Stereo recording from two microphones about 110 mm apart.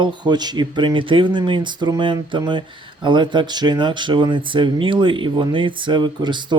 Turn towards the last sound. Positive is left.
turn(degrees=-45)  # may be behind; listen again after turning